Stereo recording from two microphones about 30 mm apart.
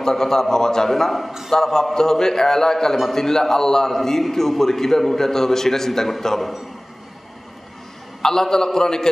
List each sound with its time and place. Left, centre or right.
0.0 s a man's voice: centre
8.2 s a man's voice: centre